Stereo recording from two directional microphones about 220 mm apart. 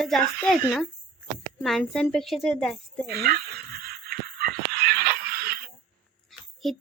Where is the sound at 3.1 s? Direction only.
45° right (ahead or behind).